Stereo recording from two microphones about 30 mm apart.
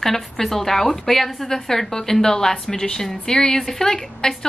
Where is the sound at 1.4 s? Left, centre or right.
Centre.